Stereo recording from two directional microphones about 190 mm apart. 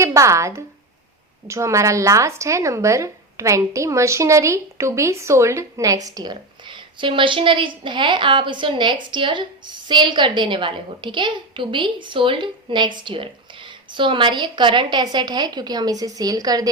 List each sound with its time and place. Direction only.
0.0 s a woman's voice: 15° right (ahead or behind)